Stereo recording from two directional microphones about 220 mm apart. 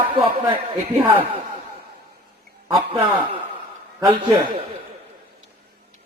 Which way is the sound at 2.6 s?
Centre (ahead or behind).